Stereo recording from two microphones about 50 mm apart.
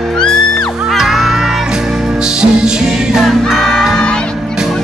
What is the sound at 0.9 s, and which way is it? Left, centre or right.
Music, centre.